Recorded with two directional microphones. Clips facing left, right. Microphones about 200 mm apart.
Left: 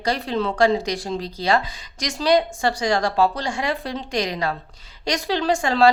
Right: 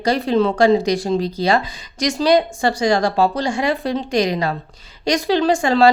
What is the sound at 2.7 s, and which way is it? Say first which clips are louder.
Speech: right 5 dB; 35° right (ahead or behind).